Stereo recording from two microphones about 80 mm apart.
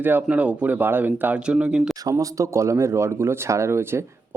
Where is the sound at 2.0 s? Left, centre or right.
Right.